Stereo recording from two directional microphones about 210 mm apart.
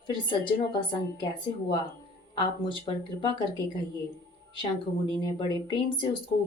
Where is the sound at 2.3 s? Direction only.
20° left (ahead or behind).